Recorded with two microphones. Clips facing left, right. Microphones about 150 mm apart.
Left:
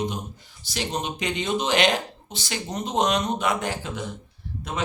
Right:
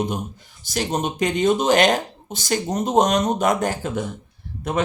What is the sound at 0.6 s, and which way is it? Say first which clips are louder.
Speech: right 5 dB; 45° right (ahead or behind).